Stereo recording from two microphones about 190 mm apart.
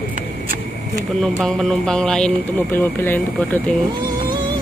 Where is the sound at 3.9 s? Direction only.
20° right (ahead or behind).